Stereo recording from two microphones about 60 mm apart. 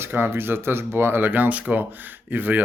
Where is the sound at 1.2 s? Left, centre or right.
Right.